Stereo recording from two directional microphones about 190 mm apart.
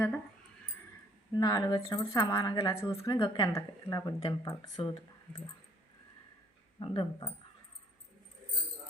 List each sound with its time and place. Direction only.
1.4 s speech: 20° left (ahead or behind)
6.7 s speech: 25° left (ahead or behind)